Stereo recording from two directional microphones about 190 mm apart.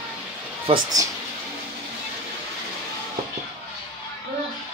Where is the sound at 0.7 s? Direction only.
20° right (ahead or behind).